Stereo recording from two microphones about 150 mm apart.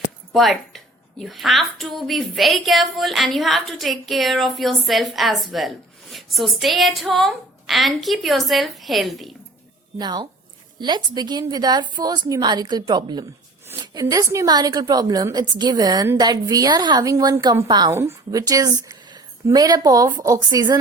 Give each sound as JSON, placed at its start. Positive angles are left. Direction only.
{"t": 0.3, "sound": "a woman's voice", "side_deg": 0}
{"t": 10.0, "sound": "a woman's voice", "side_deg": -30}